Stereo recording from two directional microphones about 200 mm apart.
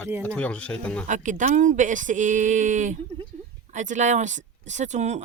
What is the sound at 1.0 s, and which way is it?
Speech, 40° right (ahead or behind).